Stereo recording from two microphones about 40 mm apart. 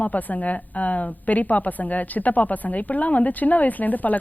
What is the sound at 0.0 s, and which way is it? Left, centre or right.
A woman's voice, left.